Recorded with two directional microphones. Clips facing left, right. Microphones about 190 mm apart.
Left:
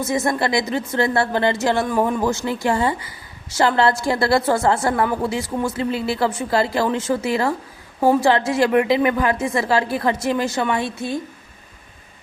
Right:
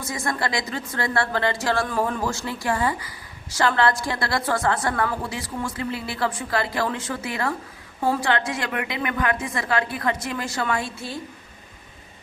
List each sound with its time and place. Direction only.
0.0 s speech: 25° left (ahead or behind)